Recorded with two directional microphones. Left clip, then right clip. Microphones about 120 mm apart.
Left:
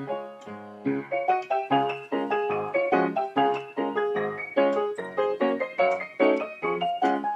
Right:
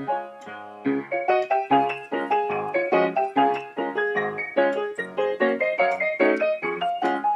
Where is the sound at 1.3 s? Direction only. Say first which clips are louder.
Right 5 dB; 25° left (ahead or behind).